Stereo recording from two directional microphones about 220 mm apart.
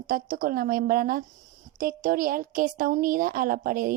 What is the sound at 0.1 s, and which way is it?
A woman's voice, 40° right (ahead or behind).